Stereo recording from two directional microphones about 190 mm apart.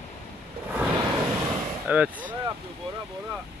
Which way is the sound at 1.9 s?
10° right (ahead or behind).